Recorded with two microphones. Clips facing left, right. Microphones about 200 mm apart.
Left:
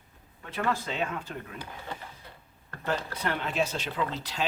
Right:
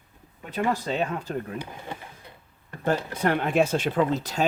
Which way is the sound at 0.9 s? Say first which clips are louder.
Right 5 dB; 40° right (ahead or behind).